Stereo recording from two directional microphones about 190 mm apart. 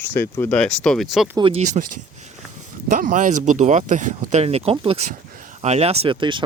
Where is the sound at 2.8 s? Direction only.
45° right (ahead or behind); by 6.4 s 25° right (ahead or behind).